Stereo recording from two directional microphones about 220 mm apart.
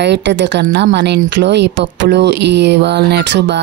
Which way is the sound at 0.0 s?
50° right (ahead or behind).